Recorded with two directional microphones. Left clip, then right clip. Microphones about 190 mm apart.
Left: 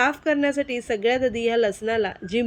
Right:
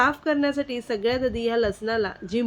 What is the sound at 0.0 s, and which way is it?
A woman's voice, 15° left (ahead or behind).